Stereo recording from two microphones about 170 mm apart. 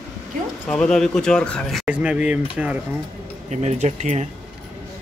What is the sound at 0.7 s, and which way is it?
Speech, 5° left (ahead or behind).